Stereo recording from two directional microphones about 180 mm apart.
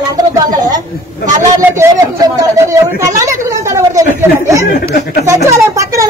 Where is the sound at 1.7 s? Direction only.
20° right (ahead or behind).